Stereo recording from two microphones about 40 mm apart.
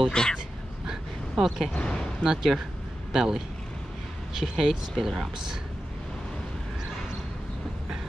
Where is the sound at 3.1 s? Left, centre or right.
Centre.